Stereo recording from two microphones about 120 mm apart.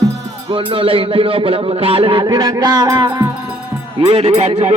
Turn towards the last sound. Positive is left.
turn(degrees=-65)  # may be behind; listen again after turning